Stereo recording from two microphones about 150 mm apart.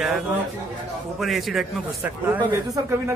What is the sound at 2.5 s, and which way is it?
Speech, 20° right (ahead or behind).